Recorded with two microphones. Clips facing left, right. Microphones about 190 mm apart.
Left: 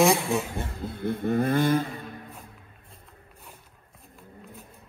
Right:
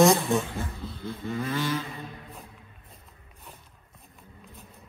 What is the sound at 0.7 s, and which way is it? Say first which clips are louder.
Vehicle: left 6 dB; 55° left (ahead or behind).